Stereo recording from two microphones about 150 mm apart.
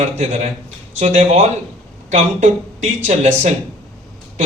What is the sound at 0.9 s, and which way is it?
A man's voice, 50° right (ahead or behind).